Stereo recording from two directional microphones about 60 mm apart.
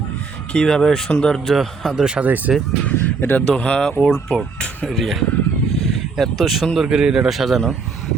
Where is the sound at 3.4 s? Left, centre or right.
Centre.